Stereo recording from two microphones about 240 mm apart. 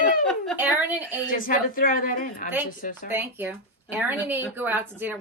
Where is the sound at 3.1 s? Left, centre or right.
Centre.